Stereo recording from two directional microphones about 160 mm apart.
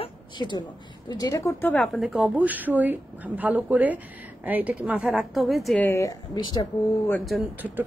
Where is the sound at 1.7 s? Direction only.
Centre (ahead or behind).